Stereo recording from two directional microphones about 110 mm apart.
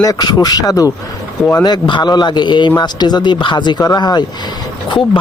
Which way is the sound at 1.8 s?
45° left (ahead or behind).